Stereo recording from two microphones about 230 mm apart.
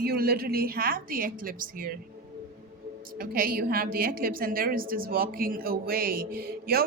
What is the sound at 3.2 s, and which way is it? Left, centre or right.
A woman's voice, right.